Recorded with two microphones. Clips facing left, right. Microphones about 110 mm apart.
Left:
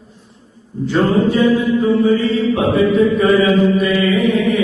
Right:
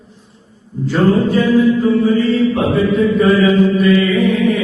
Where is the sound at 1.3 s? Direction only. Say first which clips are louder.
Right 2 dB; 20° left (ahead or behind).